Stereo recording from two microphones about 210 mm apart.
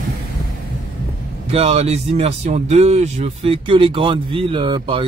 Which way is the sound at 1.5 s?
30° right (ahead or behind).